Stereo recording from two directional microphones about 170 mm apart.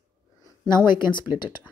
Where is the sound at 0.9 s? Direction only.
25° left (ahead or behind).